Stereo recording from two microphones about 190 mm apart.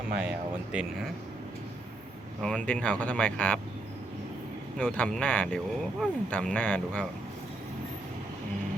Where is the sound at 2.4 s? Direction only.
5° left (ahead or behind).